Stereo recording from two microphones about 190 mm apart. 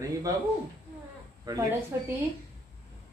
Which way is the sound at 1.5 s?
20° right (ahead or behind).